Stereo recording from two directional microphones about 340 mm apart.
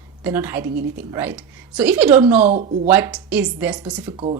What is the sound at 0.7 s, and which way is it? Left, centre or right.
Speech, right.